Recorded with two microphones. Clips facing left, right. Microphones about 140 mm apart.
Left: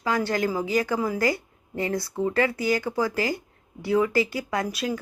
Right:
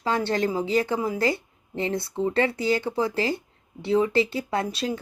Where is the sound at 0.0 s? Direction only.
25° right (ahead or behind).